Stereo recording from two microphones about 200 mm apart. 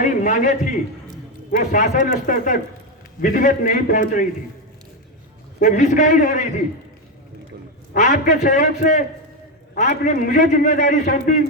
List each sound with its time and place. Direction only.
0.0 s a man's voice: 40° left (ahead or behind)
5.5 s a man's voice: 45° left (ahead or behind)
7.9 s a man's voice: 40° left (ahead or behind)